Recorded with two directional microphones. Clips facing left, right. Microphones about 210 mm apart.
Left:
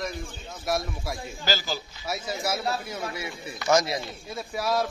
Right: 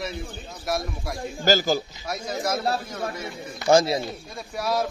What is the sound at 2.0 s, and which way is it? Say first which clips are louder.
Speech: right 1 dB; 5° left (ahead or behind).